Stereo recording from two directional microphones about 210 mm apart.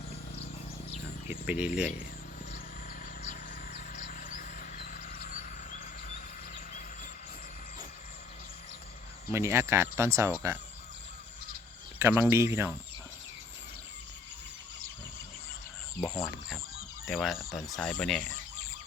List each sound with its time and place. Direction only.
1.5 s speech: 5° right (ahead or behind)
3.2 s a sound: 35° left (ahead or behind)
9.3 s speech: 10° right (ahead or behind)
11.9 s speech: 10° right (ahead or behind)
16.0 s speech: 15° left (ahead or behind)
17.1 s speech: centre (ahead or behind)